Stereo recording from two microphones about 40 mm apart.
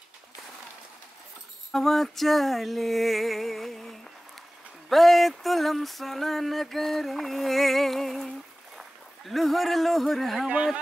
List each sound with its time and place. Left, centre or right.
1.7 s a sound: centre
8.7 s a man's voice: centre
10.5 s speech: right